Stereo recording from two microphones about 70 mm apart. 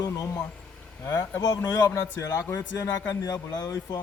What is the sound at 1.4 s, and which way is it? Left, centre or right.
Speech, left.